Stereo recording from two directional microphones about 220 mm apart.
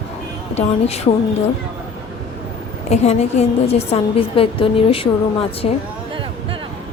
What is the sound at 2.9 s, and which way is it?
A woman's voice, 30° left (ahead or behind).